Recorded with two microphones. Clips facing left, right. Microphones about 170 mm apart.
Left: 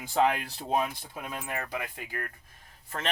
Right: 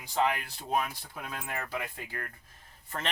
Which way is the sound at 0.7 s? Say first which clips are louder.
Left 2 dB; 20° left (ahead or behind).